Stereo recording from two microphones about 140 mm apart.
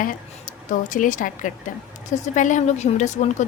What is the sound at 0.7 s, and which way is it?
A woman's voice, 70° left (ahead or behind).